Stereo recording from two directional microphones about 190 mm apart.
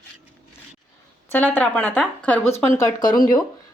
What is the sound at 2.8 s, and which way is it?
Speech, 20° left (ahead or behind).